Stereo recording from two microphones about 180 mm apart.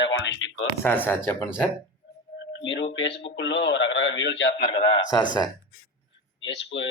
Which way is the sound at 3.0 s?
80° left.